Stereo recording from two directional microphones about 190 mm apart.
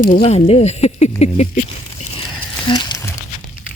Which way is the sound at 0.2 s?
30° left (ahead or behind).